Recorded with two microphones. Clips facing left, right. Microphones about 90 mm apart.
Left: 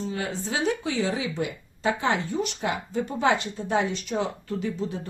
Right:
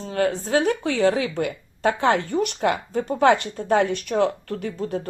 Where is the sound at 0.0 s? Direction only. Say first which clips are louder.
Right 7 dB; 50° right (ahead or behind).